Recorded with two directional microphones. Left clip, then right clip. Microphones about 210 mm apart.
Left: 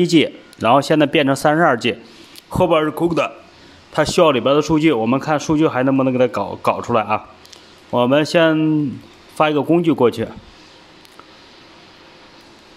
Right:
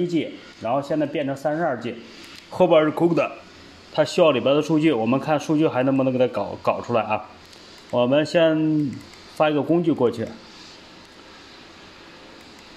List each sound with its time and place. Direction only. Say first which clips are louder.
0.0 s speech: left 9 dB; 45° left (ahead or behind)
2.5 s speech: left 1 dB; 15° left (ahead or behind)